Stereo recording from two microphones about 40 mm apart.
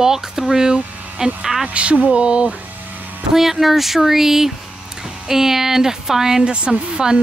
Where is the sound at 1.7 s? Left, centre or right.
Right.